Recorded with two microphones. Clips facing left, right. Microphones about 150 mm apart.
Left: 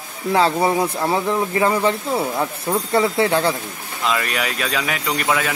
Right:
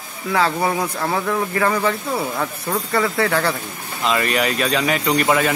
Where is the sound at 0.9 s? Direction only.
25° left (ahead or behind).